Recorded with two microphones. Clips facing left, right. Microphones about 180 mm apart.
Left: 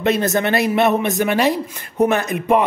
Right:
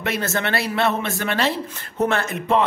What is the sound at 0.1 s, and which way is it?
Speech, 15° left (ahead or behind).